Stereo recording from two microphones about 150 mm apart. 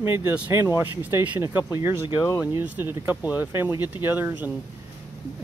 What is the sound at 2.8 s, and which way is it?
Speech, 15° right (ahead or behind).